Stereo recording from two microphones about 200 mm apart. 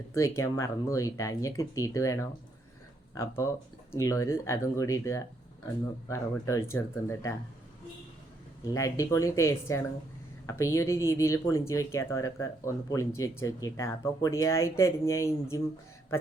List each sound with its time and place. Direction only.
0.1 s speech: 15° left (ahead or behind)
8.7 s speech: 15° left (ahead or behind)